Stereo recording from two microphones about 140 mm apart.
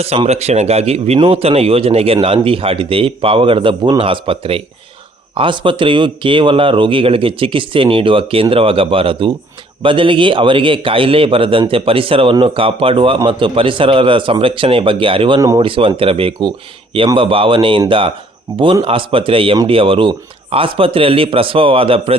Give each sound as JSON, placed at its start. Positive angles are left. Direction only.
{"t": 0.3, "sound": "speech", "side_deg": -50}